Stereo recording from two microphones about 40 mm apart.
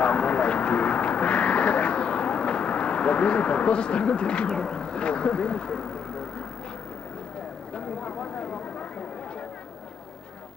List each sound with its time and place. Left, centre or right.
0.0 s vehicle: left; by 6.2 s centre
7.7 s clip-clop: left